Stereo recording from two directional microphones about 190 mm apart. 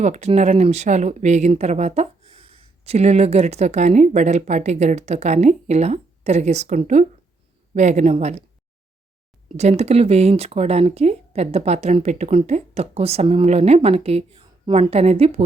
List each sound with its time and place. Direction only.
0.0 s speech: 35° right (ahead or behind)
9.6 s speech: 35° right (ahead or behind)